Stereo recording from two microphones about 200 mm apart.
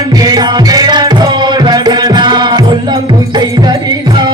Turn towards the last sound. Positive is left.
turn(degrees=-20)  # may be behind; listen again after turning